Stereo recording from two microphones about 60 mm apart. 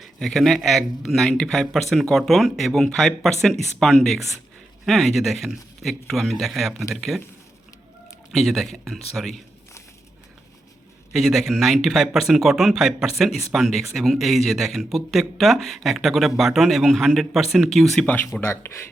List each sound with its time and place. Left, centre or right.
0.0 s speech: centre
1.3 s speech: centre
1.5 s speech: centre
8.3 s speech: centre
11.1 s speech: centre
18.0 s speech: left
18.3 s speech: left